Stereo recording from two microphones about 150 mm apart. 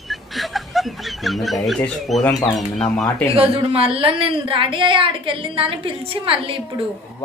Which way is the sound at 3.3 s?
40° right (ahead or behind).